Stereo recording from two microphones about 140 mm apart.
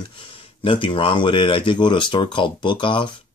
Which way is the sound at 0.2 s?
40° left (ahead or behind).